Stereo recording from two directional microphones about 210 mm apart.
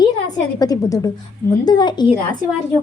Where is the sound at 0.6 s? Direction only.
15° left (ahead or behind).